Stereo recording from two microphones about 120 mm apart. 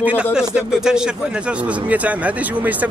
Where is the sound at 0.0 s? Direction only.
10° right (ahead or behind).